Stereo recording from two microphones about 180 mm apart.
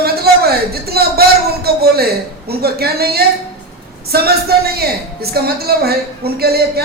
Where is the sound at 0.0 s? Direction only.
60° right (ahead or behind).